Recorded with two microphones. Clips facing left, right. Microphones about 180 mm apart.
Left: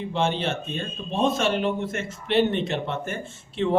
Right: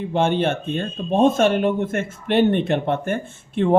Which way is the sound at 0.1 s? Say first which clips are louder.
Right 6 dB; 55° right (ahead or behind).